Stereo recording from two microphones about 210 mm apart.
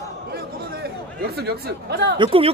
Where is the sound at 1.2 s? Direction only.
50° right (ahead or behind).